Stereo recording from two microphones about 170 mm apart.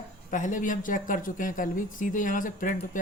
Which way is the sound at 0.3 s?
50° left (ahead or behind).